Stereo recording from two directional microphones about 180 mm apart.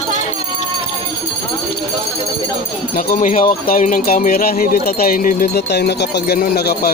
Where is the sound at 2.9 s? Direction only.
45° left (ahead or behind).